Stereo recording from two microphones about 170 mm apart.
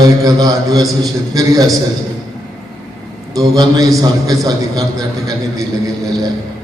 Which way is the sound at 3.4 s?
20° right (ahead or behind).